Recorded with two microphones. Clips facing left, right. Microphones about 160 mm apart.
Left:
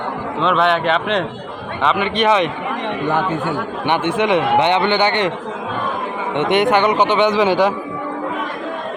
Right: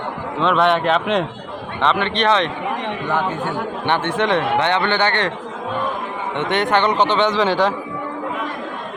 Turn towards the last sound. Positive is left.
turn(degrees=10)  # may be behind; listen again after turning